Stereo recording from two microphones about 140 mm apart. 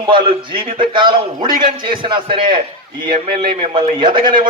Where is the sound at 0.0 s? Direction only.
40° right (ahead or behind).